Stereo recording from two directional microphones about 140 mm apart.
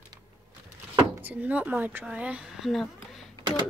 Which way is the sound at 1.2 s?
10° right (ahead or behind).